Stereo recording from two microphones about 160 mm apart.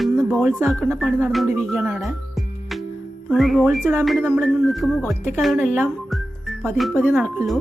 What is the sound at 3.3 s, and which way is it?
Music, centre (ahead or behind).